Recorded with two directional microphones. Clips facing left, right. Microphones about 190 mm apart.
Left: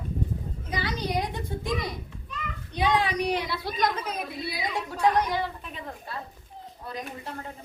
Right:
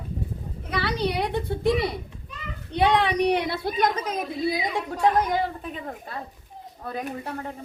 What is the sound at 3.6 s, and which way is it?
Speech, 50° right (ahead or behind).